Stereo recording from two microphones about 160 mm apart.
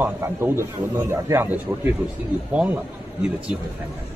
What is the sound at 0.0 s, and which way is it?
Speech, 15° right (ahead or behind).